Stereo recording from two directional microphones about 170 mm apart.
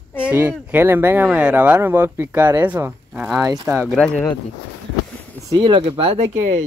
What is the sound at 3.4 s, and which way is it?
Speech, 15° right (ahead or behind).